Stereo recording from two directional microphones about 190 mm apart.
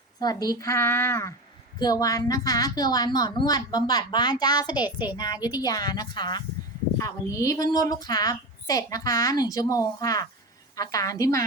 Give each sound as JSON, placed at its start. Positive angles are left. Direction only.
{"t": 0.2, "sound": "a woman's voice", "side_deg": 20}